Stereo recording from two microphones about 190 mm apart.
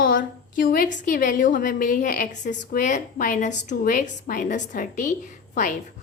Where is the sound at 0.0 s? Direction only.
45° left (ahead or behind).